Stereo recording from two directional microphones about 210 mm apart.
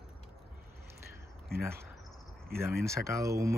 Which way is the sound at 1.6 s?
10° right (ahead or behind).